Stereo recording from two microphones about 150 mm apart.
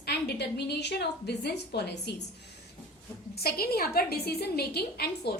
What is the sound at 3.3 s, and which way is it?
A woman's voice, 90° left.